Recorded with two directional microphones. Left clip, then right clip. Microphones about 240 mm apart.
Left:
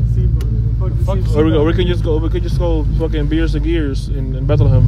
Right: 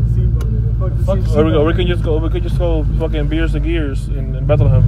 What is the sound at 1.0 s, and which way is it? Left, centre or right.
Speech, left.